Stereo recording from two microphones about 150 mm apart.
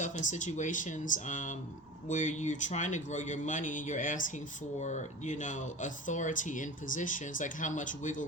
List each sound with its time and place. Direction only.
0.0 s speech: 55° left (ahead or behind)